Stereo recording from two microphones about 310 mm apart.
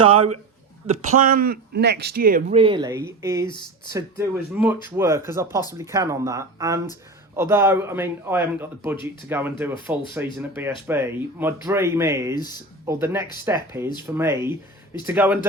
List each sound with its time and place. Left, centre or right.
0.0 s speech: centre
12.3 s speech: centre
12.8 s speech: centre